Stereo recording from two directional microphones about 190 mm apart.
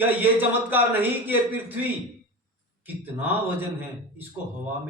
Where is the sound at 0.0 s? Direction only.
10° right (ahead or behind).